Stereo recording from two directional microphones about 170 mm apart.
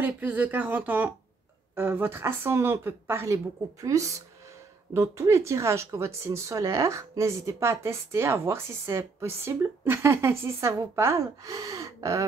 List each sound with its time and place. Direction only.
0.0 s speech: 10° right (ahead or behind)